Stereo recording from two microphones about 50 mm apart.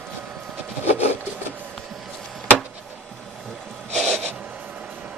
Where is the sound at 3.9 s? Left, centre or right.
Centre.